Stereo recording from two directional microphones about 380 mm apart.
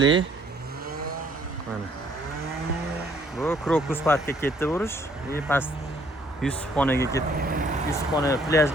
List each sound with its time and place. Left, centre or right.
0.0 s speech: right
3.3 s speech: centre
7.3 s speech: right
7.9 s speech: centre